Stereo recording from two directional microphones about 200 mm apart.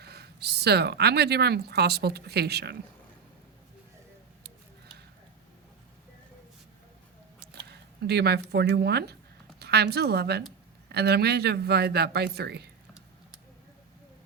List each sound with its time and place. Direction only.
0.0 s speech: 55° right (ahead or behind)
7.7 s speech: 55° right (ahead or behind)